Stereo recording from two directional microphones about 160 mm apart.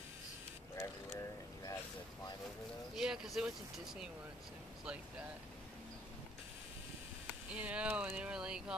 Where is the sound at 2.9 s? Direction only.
5° right (ahead or behind).